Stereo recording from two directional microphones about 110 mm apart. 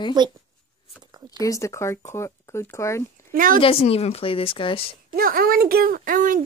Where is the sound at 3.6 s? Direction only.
60° left (ahead or behind).